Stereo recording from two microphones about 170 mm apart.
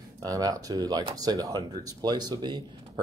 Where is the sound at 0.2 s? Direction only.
20° right (ahead or behind).